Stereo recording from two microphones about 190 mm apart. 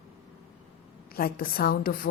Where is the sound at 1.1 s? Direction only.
50° left (ahead or behind).